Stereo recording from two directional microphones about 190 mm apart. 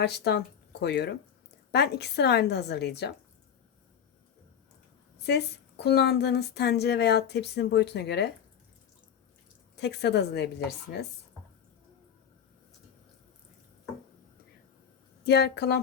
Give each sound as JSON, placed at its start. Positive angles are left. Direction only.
{"t": 0.0, "sound": "a woman's voice", "side_deg": 60}
{"t": 5.2, "sound": "a woman's voice", "side_deg": 60}
{"t": 9.7, "sound": "a woman's voice", "side_deg": 60}
{"t": 15.2, "sound": "a woman's voice", "side_deg": 55}